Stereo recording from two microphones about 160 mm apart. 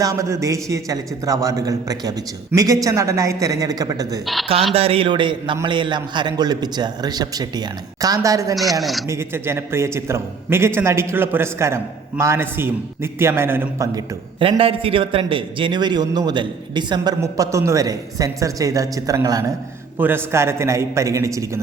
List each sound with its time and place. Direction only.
0.0 s a man's voice: 20° right (ahead or behind)
4.7 s a man's voice: 40° right (ahead or behind); by 8.5 s 20° right (ahead or behind)
8.8 s speech: centre (ahead or behind)
9.0 s a man's voice: 15° right (ahead or behind)
14.3 s a man's voice: 35° right (ahead or behind)